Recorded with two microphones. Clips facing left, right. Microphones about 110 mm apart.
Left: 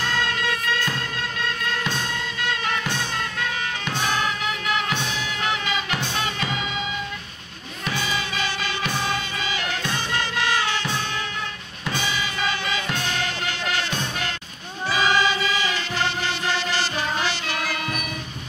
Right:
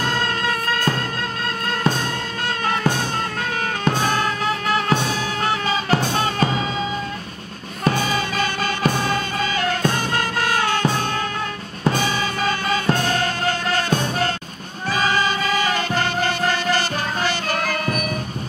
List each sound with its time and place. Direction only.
0.0 s music: 45° right (ahead or behind)
7.8 s music: 45° right (ahead or behind)